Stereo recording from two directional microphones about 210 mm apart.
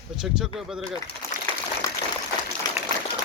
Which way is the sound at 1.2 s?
15° left (ahead or behind).